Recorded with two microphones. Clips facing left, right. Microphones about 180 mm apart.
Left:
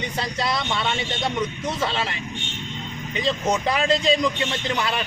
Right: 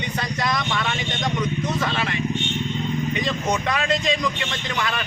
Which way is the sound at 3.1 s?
30° left (ahead or behind).